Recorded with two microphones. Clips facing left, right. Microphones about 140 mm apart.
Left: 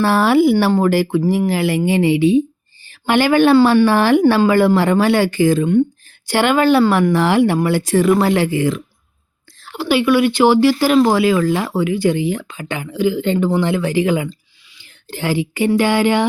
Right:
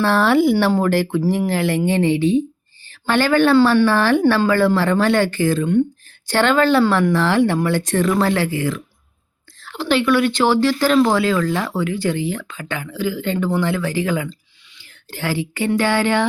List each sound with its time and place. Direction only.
0.0 s speech: 10° left (ahead or behind)